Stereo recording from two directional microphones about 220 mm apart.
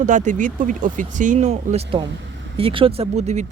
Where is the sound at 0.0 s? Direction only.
35° right (ahead or behind).